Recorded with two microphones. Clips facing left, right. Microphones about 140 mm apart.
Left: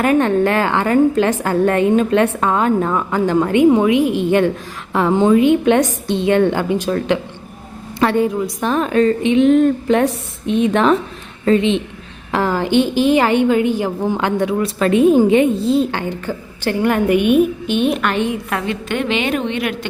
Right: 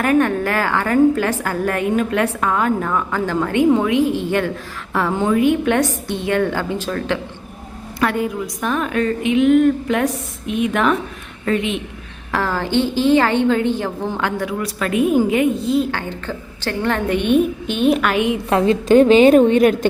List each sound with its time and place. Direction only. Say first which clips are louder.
0.0 s a woman's voice: left 2 dB; 20° left (ahead or behind); by 18.2 s centre (ahead or behind)
18.4 s a woman's voice: right 7 dB; 30° right (ahead or behind)